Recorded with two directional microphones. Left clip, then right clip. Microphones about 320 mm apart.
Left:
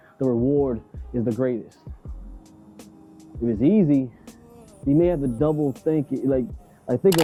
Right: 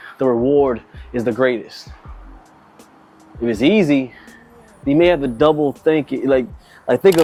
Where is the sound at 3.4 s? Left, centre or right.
Centre.